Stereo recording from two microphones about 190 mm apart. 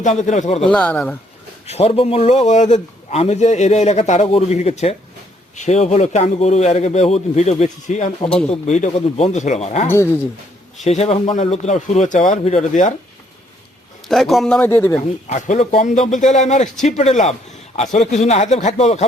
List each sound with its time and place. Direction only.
0.0 s a man's voice: 40° left (ahead or behind)
0.6 s speech: 5° left (ahead or behind)
1.6 s a man's voice: 35° left (ahead or behind)
9.8 s speech: 10° left (ahead or behind)
10.8 s a man's voice: 35° left (ahead or behind)
14.1 s speech: centre (ahead or behind)
15.0 s a man's voice: 40° left (ahead or behind)